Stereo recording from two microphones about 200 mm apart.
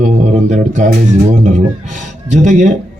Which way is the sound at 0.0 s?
35° right (ahead or behind).